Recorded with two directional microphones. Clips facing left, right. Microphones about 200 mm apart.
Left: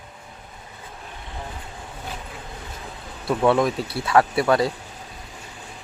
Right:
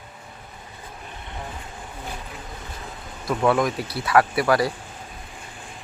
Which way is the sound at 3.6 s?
25° left (ahead or behind).